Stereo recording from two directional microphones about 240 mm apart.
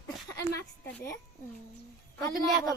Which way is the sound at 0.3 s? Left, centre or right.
Centre.